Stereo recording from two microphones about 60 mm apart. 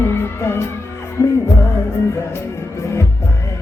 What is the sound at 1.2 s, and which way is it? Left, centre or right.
Music, left.